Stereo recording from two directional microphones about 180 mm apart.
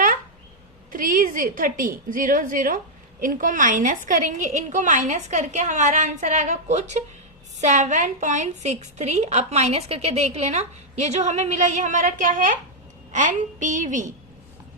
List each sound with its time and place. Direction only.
0.9 s a woman's voice: 50° right (ahead or behind)